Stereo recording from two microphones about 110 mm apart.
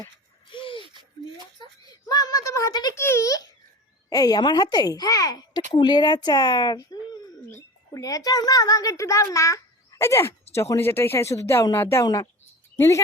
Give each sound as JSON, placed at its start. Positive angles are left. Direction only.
{"t": 0.5, "sound": "a sound", "side_deg": 50}
{"t": 2.0, "sound": "speech", "side_deg": 35}
{"t": 2.9, "sound": "speech", "side_deg": 25}